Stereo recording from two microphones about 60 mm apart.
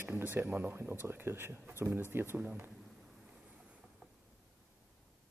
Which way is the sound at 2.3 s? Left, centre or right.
Right.